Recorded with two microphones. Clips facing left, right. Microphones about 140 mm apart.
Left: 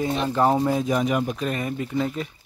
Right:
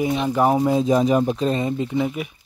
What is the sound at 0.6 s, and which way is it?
Speech, 25° right (ahead or behind).